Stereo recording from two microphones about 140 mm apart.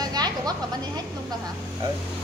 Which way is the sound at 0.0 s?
30° right (ahead or behind).